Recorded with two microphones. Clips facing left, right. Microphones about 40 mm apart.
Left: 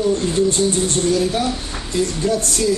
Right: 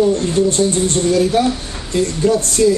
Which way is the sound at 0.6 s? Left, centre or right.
Centre.